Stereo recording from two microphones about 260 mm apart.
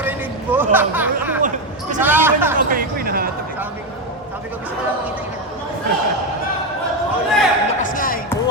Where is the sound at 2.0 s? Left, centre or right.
Centre.